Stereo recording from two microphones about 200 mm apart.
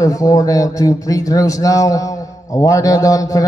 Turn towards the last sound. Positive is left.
turn(degrees=15)  # may be behind; listen again after turning